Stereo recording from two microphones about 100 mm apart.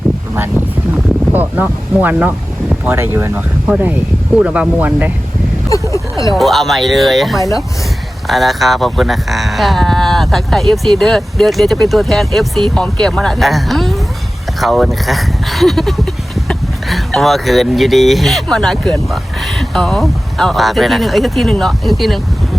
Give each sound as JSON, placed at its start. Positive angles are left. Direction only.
{"t": 1.3, "sound": "speech", "side_deg": -20}
{"t": 5.9, "sound": "a sound", "side_deg": 35}
{"t": 6.3, "sound": "speech", "side_deg": 0}